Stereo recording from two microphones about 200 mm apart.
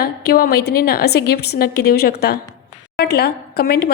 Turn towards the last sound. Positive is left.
turn(degrees=50)  # may be behind; listen again after turning